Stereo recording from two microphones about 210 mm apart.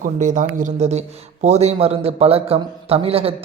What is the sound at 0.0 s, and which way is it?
Speech, 40° right (ahead or behind).